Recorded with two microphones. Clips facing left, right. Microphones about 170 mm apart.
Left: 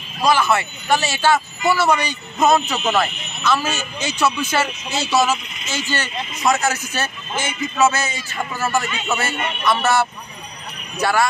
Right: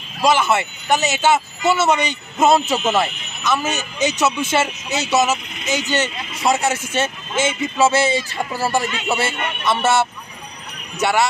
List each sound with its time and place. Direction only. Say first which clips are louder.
0.3 s speech: even; 20° right (ahead or behind)